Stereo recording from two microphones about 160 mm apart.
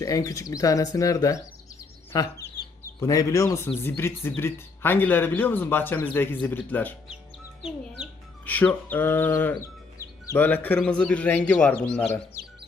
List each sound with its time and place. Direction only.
0.0 s speech: 20° left (ahead or behind)
3.8 s music: 15° left (ahead or behind)
8.4 s music: 10° left (ahead or behind)